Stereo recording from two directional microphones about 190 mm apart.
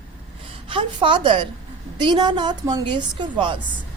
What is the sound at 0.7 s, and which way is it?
A woman's voice, 25° right (ahead or behind).